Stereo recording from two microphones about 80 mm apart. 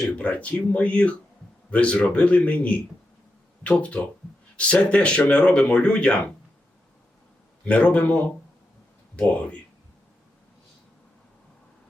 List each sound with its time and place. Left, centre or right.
0.2 s speech: centre
7.6 s speech: centre